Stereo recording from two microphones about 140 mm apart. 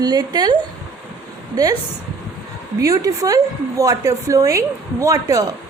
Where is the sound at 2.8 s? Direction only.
25° right (ahead or behind).